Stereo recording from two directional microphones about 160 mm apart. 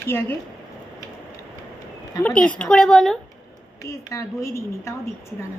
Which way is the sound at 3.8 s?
20° left (ahead or behind).